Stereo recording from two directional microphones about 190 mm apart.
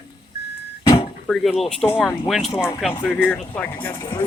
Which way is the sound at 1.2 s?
Centre (ahead or behind).